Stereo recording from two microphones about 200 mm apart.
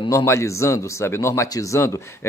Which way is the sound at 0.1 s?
15° left (ahead or behind).